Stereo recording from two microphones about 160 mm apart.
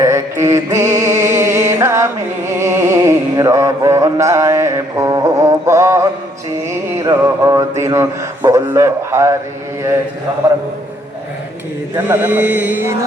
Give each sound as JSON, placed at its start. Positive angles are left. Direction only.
{"t": 0.0, "sound": "mantra", "side_deg": -15}
{"t": 1.6, "sound": "music", "side_deg": -15}
{"t": 2.6, "sound": "mantra", "side_deg": -15}
{"t": 11.9, "sound": "speech", "side_deg": -10}